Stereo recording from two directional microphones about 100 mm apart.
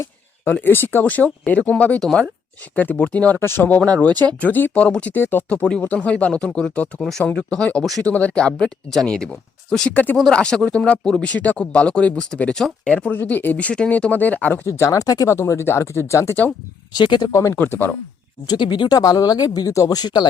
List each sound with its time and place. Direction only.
0.5 s speech: 20° left (ahead or behind); by 2.3 s 5° left (ahead or behind)
2.7 s speech: 15° left (ahead or behind)
10.2 s speech: 5° left (ahead or behind)
14.7 s speech: 30° left (ahead or behind)
15.4 s speech: 25° left (ahead or behind)
16.9 s speech: 45° left (ahead or behind)
17.3 s speech: 30° left (ahead or behind)
17.6 s speech: 20° left (ahead or behind)
18.4 s speech: 50° left (ahead or behind)